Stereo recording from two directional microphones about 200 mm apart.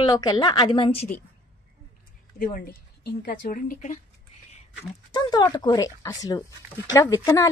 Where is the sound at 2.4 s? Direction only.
50° left (ahead or behind).